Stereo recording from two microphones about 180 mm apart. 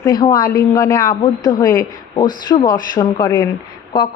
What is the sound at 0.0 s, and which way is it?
A woman's voice, 20° left (ahead or behind).